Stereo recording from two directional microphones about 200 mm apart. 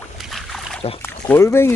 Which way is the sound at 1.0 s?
10° left (ahead or behind).